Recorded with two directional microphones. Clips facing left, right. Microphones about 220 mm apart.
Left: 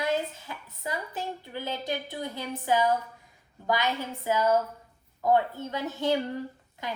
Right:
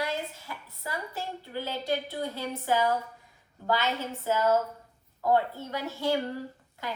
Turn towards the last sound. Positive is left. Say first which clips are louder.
# left 1 dB
turn(degrees=20)  # may be behind; listen again after turning